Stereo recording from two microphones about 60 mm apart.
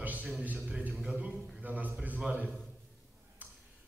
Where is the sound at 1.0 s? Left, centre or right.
Centre.